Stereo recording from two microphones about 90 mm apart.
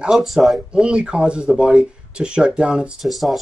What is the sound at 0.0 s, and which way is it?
Speech, 5° right (ahead or behind).